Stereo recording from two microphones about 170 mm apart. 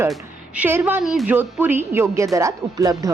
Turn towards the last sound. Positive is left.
turn(degrees=-20)  # may be behind; listen again after turning